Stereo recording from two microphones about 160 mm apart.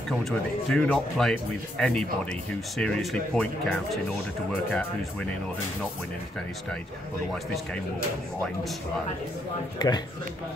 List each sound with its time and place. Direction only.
0.3 s speech: 5° left (ahead or behind)
9.8 s speech: 25° left (ahead or behind)